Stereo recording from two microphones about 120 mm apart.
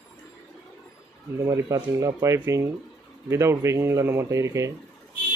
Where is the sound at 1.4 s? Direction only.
25° right (ahead or behind).